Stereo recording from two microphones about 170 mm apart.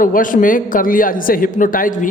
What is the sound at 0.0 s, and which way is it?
A man's voice, 55° left (ahead or behind).